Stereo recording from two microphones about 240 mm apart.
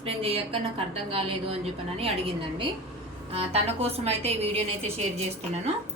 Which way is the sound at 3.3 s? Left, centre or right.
Right.